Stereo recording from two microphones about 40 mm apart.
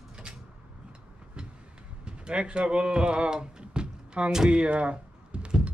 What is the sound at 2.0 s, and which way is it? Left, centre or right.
Speech, right.